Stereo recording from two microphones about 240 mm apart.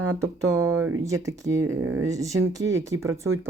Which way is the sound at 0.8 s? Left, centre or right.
Right.